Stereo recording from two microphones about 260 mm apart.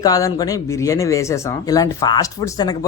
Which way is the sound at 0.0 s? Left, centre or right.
Centre.